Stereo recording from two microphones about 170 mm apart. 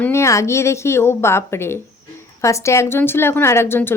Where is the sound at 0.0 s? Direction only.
15° left (ahead or behind).